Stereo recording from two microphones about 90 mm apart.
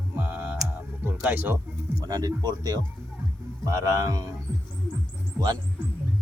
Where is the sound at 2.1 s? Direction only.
45° right (ahead or behind).